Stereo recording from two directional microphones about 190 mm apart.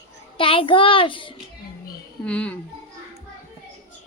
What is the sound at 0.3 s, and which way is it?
Speech, 30° left (ahead or behind).